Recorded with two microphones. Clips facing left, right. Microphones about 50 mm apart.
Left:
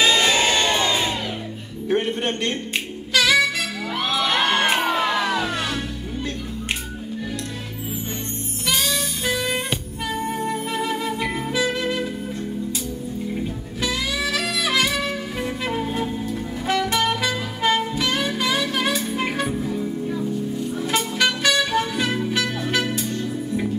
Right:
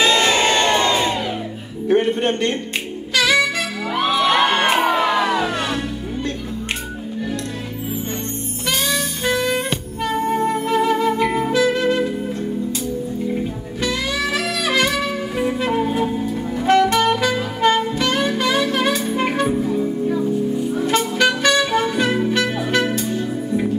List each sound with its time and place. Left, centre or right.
0.0 s crowd: centre
1.9 s a man's voice: centre
3.2 s saxophone: centre
3.9 s music: centre
8.6 s saxophone: centre
11.5 s music: centre
13.8 s saxophone: centre
19.6 s music: centre
20.5 s music: centre